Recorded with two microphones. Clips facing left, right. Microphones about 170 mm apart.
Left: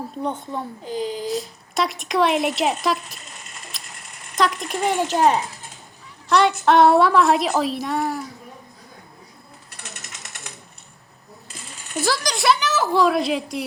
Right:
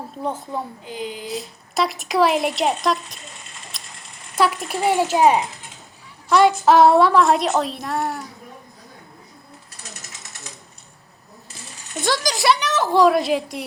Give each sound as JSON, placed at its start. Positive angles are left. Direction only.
{"t": 0.2, "sound": "speech", "side_deg": 0}
{"t": 0.9, "sound": "speech", "side_deg": 40}
{"t": 1.3, "sound": "speech", "side_deg": 0}
{"t": 3.7, "sound": "ratchet", "side_deg": 0}
{"t": 4.4, "sound": "speech", "side_deg": -5}
{"t": 6.7, "sound": "speech", "side_deg": 0}
{"t": 9.7, "sound": "ratchet", "side_deg": 65}
{"t": 11.9, "sound": "speech", "side_deg": 0}